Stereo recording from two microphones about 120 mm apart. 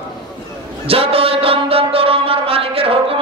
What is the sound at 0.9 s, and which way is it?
Music, 55° right (ahead or behind).